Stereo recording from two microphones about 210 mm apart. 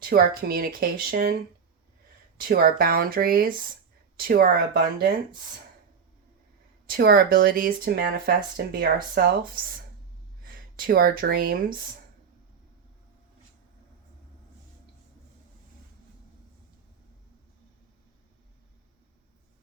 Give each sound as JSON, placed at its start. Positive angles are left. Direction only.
{"t": 0.0, "sound": "speech", "side_deg": -45}
{"t": 2.4, "sound": "speech", "side_deg": -45}
{"t": 6.8, "sound": "speech", "side_deg": -45}